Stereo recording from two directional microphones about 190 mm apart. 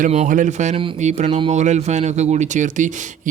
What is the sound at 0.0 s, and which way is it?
A man's voice, 40° right (ahead or behind).